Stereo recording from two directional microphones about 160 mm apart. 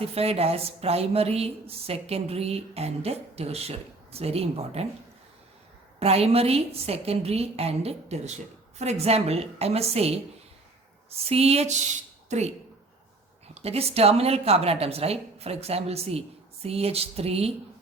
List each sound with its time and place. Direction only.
0.0 s a woman's voice: 40° right (ahead or behind)
6.0 s a woman's voice: 40° right (ahead or behind)
11.3 s a woman's voice: 40° right (ahead or behind)